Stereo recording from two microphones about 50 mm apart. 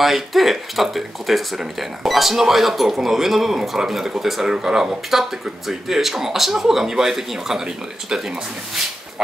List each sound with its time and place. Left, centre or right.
0.0 s speech: centre